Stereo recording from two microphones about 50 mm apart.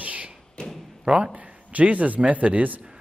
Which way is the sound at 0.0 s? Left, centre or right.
Right.